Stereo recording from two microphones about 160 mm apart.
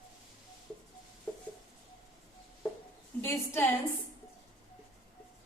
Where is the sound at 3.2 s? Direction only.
15° left (ahead or behind).